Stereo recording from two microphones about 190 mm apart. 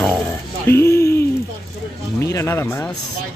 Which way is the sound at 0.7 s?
15° left (ahead or behind).